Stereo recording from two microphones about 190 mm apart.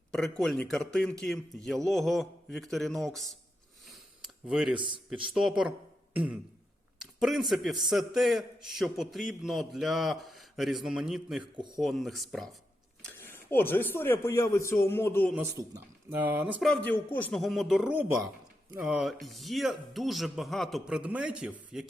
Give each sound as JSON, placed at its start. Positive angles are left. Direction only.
{"t": 0.1, "sound": "a man's voice", "side_deg": 0}
{"t": 4.2, "sound": "a sound", "side_deg": -5}
{"t": 5.0, "sound": "a man's voice", "side_deg": -5}
{"t": 11.5, "sound": "a man's voice", "side_deg": -25}
{"t": 11.8, "sound": "a man's voice", "side_deg": 0}
{"t": 13.1, "sound": "speech", "side_deg": 10}
{"t": 15.3, "sound": "a man's voice", "side_deg": -15}
{"t": 16.6, "sound": "a man's voice", "side_deg": 5}